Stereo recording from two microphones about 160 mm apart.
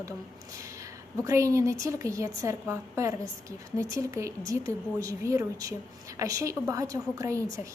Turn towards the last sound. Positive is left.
turn(degrees=-20)  # may be behind; listen again after turning